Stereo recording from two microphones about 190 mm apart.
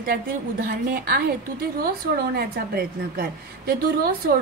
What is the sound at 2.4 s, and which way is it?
A woman's voice, 55° right (ahead or behind).